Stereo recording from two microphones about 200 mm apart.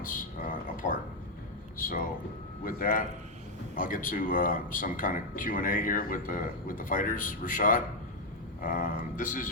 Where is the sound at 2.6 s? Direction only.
45° left (ahead or behind).